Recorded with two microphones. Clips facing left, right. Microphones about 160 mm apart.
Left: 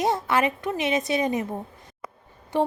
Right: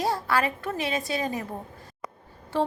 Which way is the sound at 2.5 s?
15° left (ahead or behind).